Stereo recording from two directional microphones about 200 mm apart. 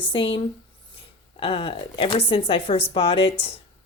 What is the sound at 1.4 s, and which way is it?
Speech, 30° left (ahead or behind).